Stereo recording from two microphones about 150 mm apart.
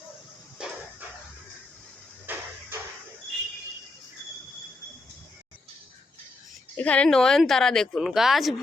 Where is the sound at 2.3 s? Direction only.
15° right (ahead or behind).